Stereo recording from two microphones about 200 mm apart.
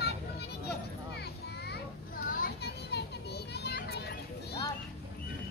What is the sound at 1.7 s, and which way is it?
Children playing, 45° left (ahead or behind).